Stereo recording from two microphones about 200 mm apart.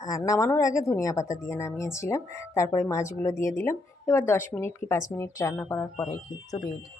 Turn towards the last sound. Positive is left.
turn(degrees=20)  # may be behind; listen again after turning